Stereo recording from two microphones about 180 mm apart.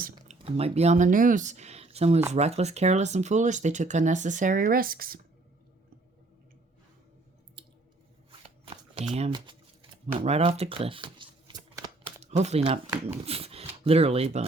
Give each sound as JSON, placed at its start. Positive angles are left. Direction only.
{"t": 0.3, "sound": "speech", "side_deg": -35}
{"t": 8.3, "sound": "shuffling cards", "side_deg": -30}
{"t": 9.1, "sound": "speech", "side_deg": -30}
{"t": 10.2, "sound": "shuffling cards", "side_deg": -35}
{"t": 12.2, "sound": "speech", "side_deg": -35}